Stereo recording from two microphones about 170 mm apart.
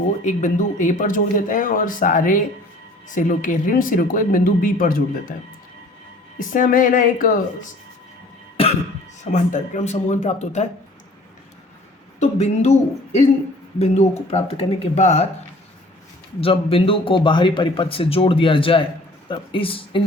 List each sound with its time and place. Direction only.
0.3 s speech: 45° left (ahead or behind)
6.5 s speech: 50° left (ahead or behind)
8.6 s cough: 35° left (ahead or behind)
9.2 s speech: 45° left (ahead or behind)
12.2 s speech: 40° left (ahead or behind)
16.4 s speech: 35° left (ahead or behind)